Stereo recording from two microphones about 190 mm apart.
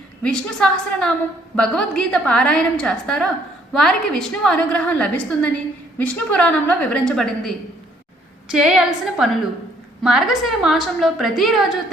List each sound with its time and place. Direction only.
0.2 s a woman's voice: 5° left (ahead or behind)